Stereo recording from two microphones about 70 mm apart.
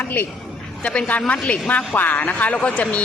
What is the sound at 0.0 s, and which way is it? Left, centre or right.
Speech, left.